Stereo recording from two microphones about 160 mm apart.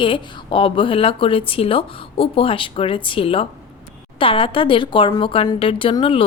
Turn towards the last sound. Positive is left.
turn(degrees=35)  # may be behind; listen again after turning